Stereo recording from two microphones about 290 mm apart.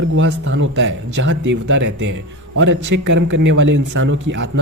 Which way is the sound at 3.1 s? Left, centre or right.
Right.